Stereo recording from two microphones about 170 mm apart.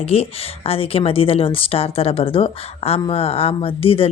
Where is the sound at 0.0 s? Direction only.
35° left (ahead or behind).